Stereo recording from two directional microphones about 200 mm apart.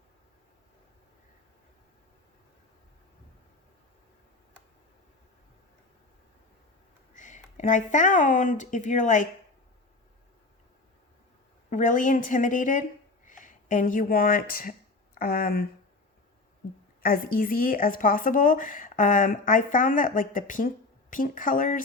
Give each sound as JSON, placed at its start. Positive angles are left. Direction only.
{"t": 7.1, "sound": "speech", "side_deg": 40}
{"t": 11.7, "sound": "a woman's voice", "side_deg": 40}
{"t": 17.0, "sound": "speech", "side_deg": 45}